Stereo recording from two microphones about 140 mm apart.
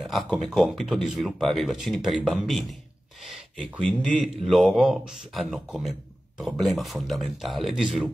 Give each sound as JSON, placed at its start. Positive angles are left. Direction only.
{"t": 0.0, "sound": "speech", "side_deg": -5}
{"t": 4.2, "sound": "speech", "side_deg": 0}